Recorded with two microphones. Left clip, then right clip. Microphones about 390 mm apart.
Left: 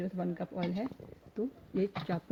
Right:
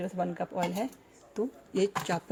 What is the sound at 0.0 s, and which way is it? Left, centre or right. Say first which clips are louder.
Speech: right 5 dB; right.